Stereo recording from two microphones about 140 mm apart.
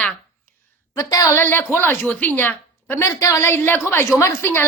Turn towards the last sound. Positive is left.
turn(degrees=20)  # may be behind; listen again after turning